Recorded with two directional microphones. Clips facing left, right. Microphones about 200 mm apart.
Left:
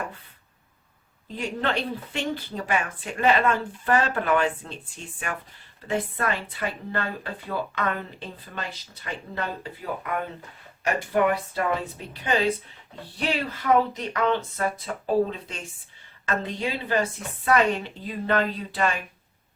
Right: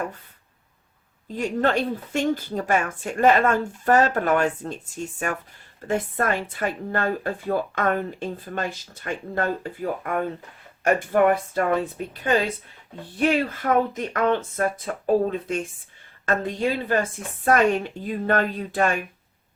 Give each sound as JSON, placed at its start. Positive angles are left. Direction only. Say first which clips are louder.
{"t": 1.3, "sound": "speech", "louder": "right 5 dB", "side_deg": -45}
{"t": 13.1, "sound": "speech", "louder": "right 6 dB", "side_deg": -50}